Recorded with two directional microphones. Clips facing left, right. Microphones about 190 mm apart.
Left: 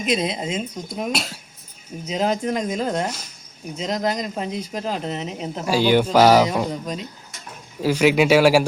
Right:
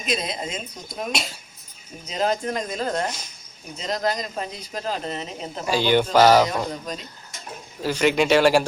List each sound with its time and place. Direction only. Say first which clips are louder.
0.0 s speech: left 5 dB; 20° left (ahead or behind)
3.8 s speech: left 2 dB; 20° left (ahead or behind)
7.8 s speech: left 3 dB; 10° left (ahead or behind)